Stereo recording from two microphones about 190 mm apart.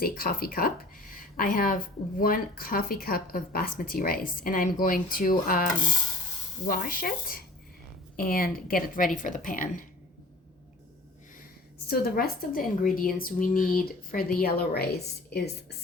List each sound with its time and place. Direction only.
0.0 s speech: 50° left (ahead or behind)
6.7 s speech: 50° left (ahead or behind)
11.9 s speech: 55° left (ahead or behind)